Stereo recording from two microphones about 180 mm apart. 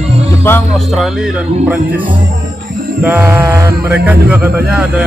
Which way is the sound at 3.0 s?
10° right (ahead or behind).